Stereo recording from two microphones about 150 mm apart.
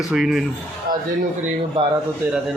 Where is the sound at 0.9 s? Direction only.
70° right (ahead or behind).